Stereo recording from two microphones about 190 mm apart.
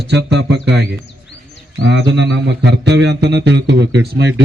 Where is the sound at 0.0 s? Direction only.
65° right (ahead or behind).